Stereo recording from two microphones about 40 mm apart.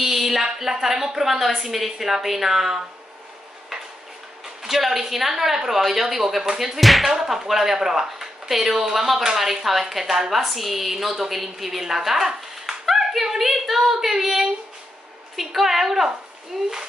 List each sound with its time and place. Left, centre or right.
0.0 s a woman's voice: centre
4.6 s a woman's voice: centre
6.8 s a woman's voice: centre
7.1 s a woman's voice: centre